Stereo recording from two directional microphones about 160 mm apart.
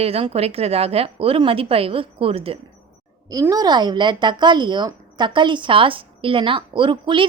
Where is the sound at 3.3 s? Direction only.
20° right (ahead or behind).